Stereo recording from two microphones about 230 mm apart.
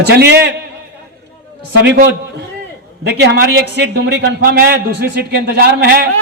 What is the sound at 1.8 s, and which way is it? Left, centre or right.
A man's voice, right.